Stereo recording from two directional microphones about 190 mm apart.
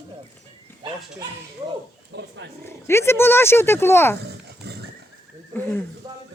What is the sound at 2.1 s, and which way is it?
Speech, 65° right (ahead or behind).